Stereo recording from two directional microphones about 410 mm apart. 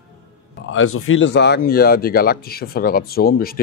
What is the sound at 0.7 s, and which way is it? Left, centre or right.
Speech, left.